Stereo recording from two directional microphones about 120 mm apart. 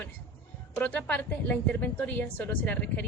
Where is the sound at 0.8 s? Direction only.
10° left (ahead or behind).